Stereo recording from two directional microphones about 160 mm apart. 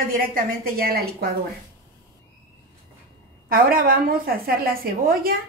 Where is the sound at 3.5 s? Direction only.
65° right (ahead or behind).